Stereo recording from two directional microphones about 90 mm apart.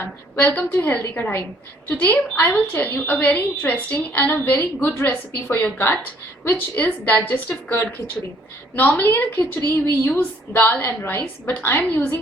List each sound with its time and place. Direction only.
0.0 s a woman's voice: 20° left (ahead or behind)